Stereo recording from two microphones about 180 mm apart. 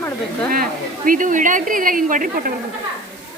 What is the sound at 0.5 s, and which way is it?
A woman's voice, 50° right (ahead or behind).